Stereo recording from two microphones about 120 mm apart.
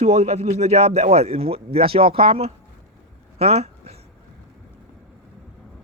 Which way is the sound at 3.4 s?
60° right (ahead or behind).